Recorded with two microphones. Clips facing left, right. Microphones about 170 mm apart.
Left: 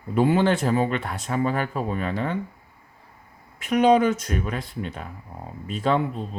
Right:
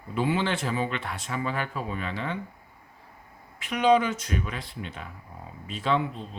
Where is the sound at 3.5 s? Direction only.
45° left (ahead or behind).